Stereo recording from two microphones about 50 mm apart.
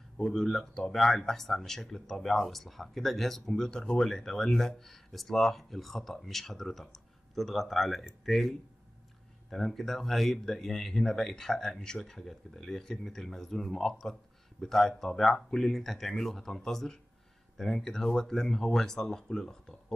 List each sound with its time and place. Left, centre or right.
0.2 s speech: centre